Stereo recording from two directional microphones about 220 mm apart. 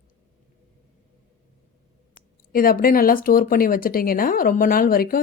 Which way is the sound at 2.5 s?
40° left (ahead or behind).